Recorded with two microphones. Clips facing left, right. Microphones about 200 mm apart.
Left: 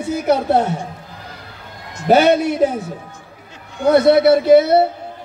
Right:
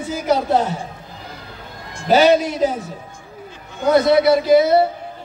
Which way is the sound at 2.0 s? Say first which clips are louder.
Left 1 dB; 60° left (ahead or behind).